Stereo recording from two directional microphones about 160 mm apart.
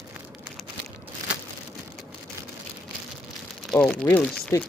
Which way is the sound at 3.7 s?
5° left (ahead or behind).